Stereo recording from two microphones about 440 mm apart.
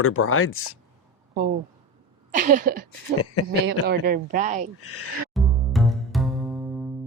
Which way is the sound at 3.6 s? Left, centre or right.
Right.